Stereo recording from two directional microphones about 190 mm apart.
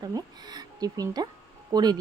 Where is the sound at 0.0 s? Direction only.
20° right (ahead or behind).